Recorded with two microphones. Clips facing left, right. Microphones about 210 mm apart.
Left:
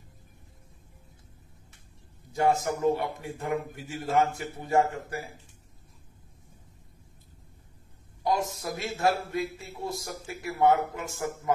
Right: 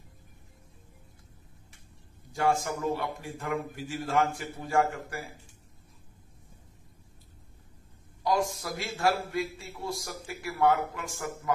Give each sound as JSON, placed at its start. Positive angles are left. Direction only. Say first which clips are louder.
{"t": 2.3, "sound": "a man's voice", "louder": "left 2 dB", "side_deg": 20}
{"t": 8.2, "sound": "a man's voice", "louder": "even", "side_deg": 25}